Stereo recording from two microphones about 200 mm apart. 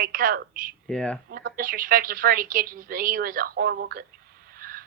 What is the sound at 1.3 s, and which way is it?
A woman's voice, 50° right (ahead or behind).